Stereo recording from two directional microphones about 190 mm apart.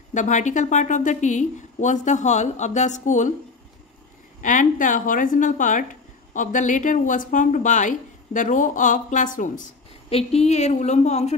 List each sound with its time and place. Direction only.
0.1 s a woman's voice: 40° left (ahead or behind)
4.4 s a woman's voice: 45° left (ahead or behind)